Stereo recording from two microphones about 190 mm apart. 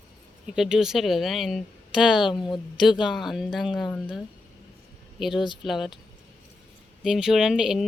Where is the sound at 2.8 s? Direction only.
Centre (ahead or behind).